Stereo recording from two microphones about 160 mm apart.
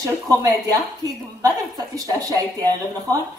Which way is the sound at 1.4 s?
20° right (ahead or behind).